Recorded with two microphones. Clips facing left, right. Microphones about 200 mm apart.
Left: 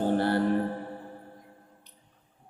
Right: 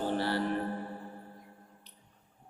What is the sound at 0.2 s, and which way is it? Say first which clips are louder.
Mantra: left 6 dB; 50° left (ahead or behind).